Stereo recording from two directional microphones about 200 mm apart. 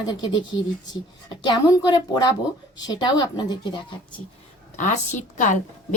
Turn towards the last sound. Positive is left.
turn(degrees=40)  # may be behind; listen again after turning